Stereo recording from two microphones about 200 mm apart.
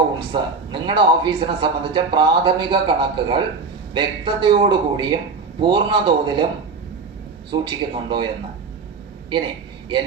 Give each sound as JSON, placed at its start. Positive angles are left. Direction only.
{"t": 0.3, "sound": "speech", "side_deg": -25}
{"t": 7.5, "sound": "speech", "side_deg": -25}